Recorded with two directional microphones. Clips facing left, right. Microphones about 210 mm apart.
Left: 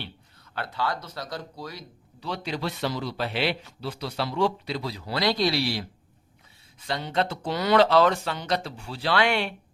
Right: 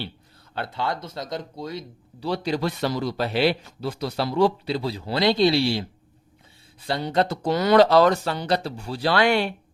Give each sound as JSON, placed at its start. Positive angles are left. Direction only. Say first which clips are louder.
{"t": 0.5, "sound": "speech", "louder": "right 2 dB", "side_deg": -25}
{"t": 2.2, "sound": "a man's voice", "louder": "right 6 dB", "side_deg": -35}